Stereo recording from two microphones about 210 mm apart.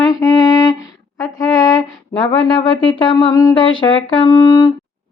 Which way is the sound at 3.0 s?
20° left (ahead or behind).